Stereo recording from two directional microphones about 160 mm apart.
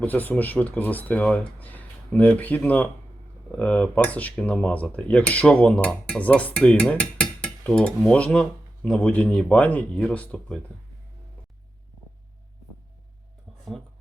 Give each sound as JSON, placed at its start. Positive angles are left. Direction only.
{"t": 0.0, "sound": "speech", "side_deg": 10}